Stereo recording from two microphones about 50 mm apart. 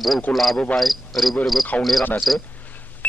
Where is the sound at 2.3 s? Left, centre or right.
Centre.